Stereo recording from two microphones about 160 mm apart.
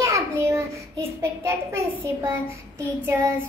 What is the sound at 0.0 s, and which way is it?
A child's voice, 20° right (ahead or behind).